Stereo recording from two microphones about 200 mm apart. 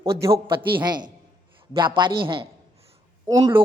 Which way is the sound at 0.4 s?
25° right (ahead or behind).